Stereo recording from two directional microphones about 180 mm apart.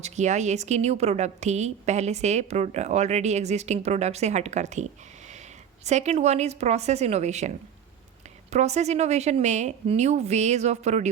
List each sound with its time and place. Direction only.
0.0 s a woman's voice: 40° right (ahead or behind)